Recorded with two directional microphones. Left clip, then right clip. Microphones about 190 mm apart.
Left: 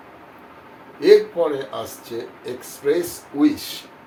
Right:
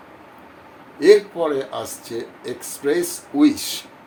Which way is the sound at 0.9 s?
55° right (ahead or behind).